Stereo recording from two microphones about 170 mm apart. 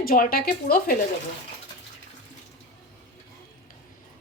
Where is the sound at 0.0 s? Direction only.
60° left (ahead or behind).